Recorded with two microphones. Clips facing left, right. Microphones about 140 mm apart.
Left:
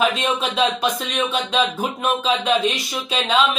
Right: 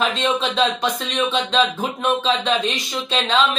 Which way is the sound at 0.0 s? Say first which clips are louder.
Even; 10° left (ahead or behind).